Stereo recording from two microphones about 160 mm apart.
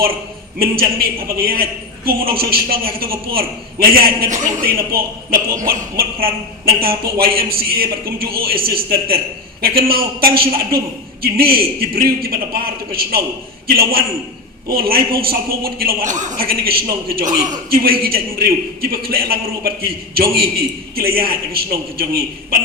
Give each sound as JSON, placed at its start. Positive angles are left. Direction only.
{"t": 0.6, "sound": "a man's voice", "side_deg": -65}